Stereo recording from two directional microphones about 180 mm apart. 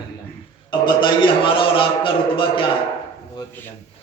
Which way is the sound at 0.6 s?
25° left (ahead or behind).